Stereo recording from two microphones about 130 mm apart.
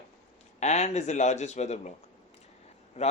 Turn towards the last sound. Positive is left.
turn(degrees=55)  # may be behind; listen again after turning